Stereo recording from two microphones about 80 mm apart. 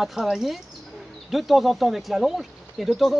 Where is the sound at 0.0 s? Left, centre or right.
Centre.